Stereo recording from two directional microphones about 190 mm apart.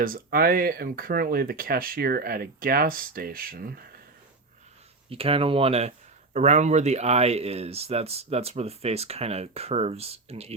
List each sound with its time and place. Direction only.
0.0 s speech: 50° right (ahead or behind)
5.0 s speech: 30° right (ahead or behind)